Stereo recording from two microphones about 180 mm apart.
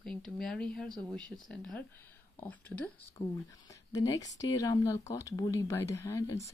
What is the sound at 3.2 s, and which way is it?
Speech, 35° left (ahead or behind).